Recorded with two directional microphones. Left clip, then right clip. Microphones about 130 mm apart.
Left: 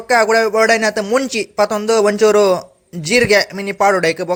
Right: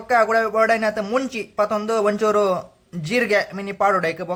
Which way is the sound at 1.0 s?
20° left (ahead or behind).